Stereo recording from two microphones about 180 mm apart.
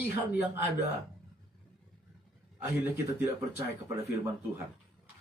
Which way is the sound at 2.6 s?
15° right (ahead or behind).